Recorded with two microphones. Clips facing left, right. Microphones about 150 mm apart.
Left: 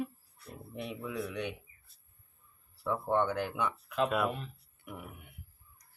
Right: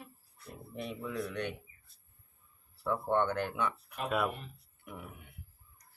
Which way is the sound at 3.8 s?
90° left.